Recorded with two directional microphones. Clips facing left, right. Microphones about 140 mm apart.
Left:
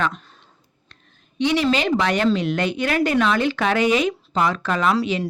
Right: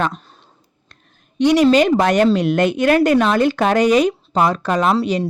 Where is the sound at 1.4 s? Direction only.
45° right (ahead or behind).